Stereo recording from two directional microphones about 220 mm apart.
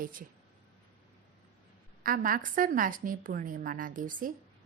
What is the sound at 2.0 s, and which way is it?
A woman's voice, 40° right (ahead or behind).